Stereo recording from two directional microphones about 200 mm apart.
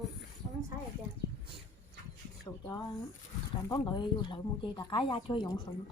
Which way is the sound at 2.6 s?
20° left (ahead or behind).